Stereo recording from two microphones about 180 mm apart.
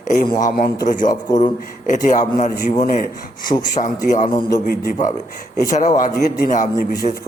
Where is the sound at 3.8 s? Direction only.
45° left (ahead or behind).